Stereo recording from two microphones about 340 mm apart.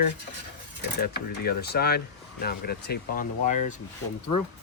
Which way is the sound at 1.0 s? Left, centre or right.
Left.